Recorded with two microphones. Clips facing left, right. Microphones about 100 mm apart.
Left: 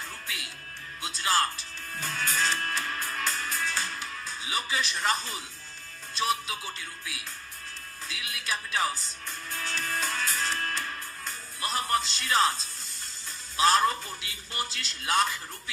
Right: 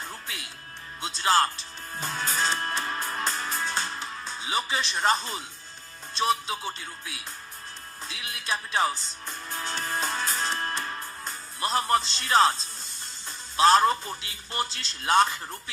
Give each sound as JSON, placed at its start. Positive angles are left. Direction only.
{"t": 1.0, "sound": "music", "side_deg": -30}
{"t": 6.1, "sound": "speech", "side_deg": -30}
{"t": 8.0, "sound": "music", "side_deg": -25}
{"t": 11.6, "sound": "speech", "side_deg": -30}
{"t": 13.6, "sound": "speech", "side_deg": -30}